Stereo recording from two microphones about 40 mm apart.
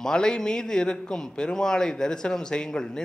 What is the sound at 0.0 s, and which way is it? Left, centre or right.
Speech, centre.